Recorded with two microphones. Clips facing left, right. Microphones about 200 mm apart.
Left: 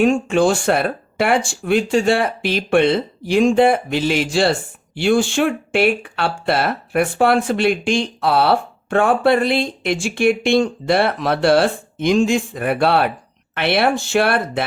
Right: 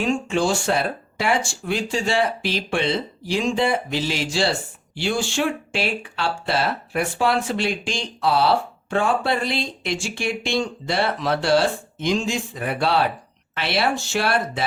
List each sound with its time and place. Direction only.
0.0 s speech: 55° left (ahead or behind)